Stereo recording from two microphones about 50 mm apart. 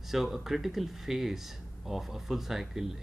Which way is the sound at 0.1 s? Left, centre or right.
Centre.